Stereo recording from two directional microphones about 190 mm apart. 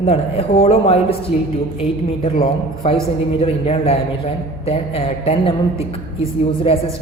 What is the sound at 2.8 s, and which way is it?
A woman's voice, 30° left (ahead or behind).